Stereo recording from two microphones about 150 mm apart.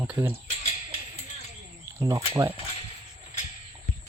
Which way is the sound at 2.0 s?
20° right (ahead or behind).